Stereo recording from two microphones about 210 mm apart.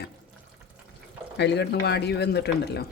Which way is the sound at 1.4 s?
55° left (ahead or behind).